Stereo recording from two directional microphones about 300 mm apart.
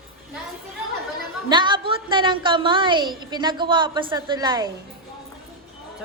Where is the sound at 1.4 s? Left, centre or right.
Centre.